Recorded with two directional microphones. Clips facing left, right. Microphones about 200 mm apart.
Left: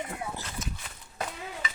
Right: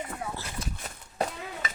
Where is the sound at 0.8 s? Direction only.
45° right (ahead or behind).